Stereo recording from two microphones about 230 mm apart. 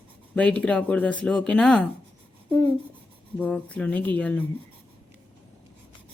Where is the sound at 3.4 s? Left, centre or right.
Centre.